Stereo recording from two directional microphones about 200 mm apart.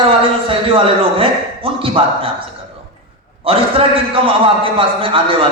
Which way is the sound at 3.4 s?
30° right (ahead or behind).